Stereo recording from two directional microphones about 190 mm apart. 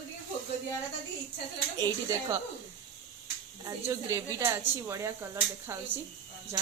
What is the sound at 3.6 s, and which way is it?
Speech, 15° right (ahead or behind).